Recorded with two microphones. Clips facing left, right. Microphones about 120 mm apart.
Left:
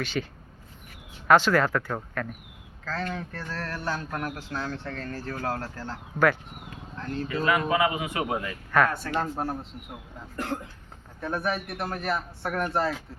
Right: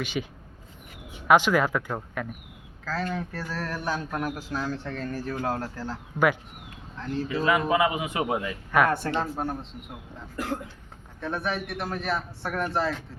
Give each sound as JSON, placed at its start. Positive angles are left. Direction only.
{"t": 0.0, "sound": "speech", "side_deg": -15}
{"t": 1.3, "sound": "a man's voice", "side_deg": -15}
{"t": 7.3, "sound": "speech", "side_deg": -15}
{"t": 9.1, "sound": "a man's voice", "side_deg": 0}